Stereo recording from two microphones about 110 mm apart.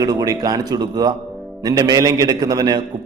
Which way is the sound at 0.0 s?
35° right (ahead or behind).